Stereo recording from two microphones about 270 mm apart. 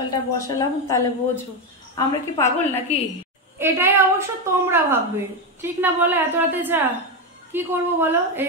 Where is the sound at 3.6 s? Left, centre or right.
Centre.